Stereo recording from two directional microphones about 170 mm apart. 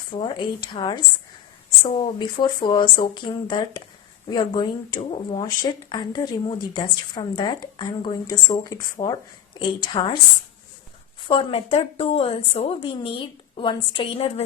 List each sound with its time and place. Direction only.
0.1 s speech: 30° left (ahead or behind)
11.3 s a woman's voice: 35° left (ahead or behind)